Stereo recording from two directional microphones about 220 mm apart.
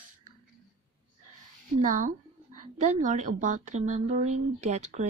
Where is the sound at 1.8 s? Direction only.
35° right (ahead or behind).